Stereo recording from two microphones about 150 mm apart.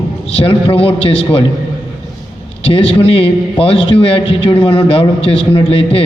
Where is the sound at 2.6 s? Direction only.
35° left (ahead or behind).